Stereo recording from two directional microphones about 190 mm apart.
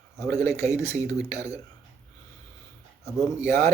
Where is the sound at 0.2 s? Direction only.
15° left (ahead or behind).